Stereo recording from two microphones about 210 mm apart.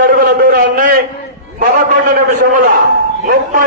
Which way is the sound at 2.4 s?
40° right (ahead or behind).